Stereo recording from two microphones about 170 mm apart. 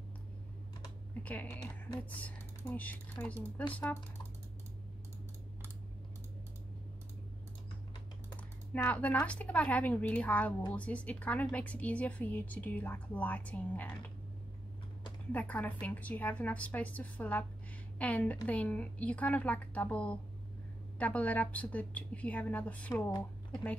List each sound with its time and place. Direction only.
1.2 s speech: 10° left (ahead or behind)
1.6 s speech: 25° left (ahead or behind)
2.1 s speech: 10° left (ahead or behind)
8.7 s speech: 10° left (ahead or behind)
15.3 s a woman's voice: 10° left (ahead or behind)